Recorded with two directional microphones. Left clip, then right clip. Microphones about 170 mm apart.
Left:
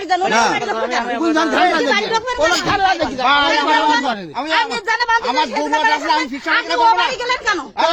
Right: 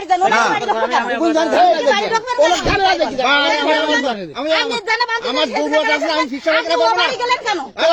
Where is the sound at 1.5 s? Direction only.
40° left (ahead or behind).